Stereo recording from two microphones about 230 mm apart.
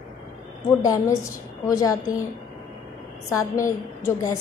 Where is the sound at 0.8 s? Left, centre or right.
Centre.